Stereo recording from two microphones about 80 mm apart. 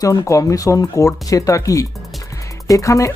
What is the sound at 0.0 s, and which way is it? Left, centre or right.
Speech, left.